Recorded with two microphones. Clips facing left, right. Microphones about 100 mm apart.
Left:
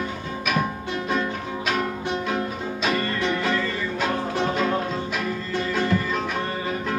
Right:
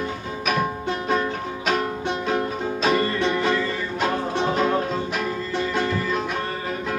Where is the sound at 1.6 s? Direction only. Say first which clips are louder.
Right 2 dB; 30° right (ahead or behind).